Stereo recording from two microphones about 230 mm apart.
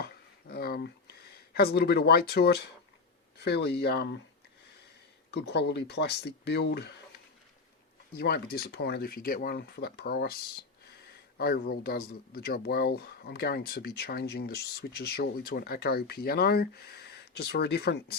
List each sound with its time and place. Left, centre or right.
0.0 s a sound: left
1.5 s speech: left
5.3 s speech: left
8.1 s speech: left